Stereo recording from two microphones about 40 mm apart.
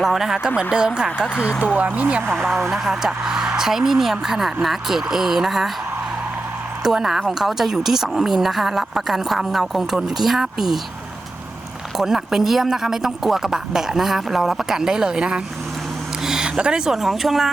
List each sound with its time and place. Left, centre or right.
0.0 s speech: centre
0.7 s speech: right
1.6 s speech: right
2.3 s a woman's voice: centre
6.8 s a woman's voice: centre
11.9 s speech: centre